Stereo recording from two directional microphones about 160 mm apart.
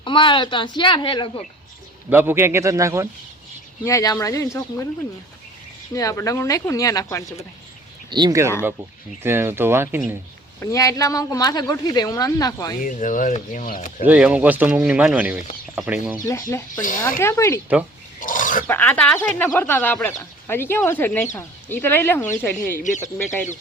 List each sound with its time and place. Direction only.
0.0 s a woman's voice: 30° left (ahead or behind)
2.0 s speech: 15° right (ahead or behind)
3.8 s a woman's voice: 20° left (ahead or behind)
5.9 s a woman's voice: 20° left (ahead or behind)
8.1 s speech: 25° right (ahead or behind)
10.6 s a woman's voice: 20° left (ahead or behind)
12.8 s speech: 55° left (ahead or behind)
14.0 s speech: 10° right (ahead or behind)
16.2 s speech: 15° left (ahead or behind)
16.8 s speech: 55° left (ahead or behind)
17.2 s speech: 15° left (ahead or behind)
18.2 s pig: 55° left (ahead or behind)
18.7 s speech: 10° left (ahead or behind)